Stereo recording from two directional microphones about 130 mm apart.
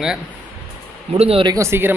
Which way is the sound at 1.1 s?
50° right (ahead or behind).